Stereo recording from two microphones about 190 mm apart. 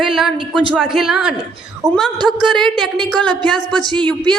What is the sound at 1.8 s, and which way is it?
Speech, 15° right (ahead or behind).